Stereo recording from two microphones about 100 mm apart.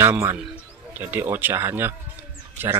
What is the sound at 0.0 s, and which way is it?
Speech, 25° right (ahead or behind).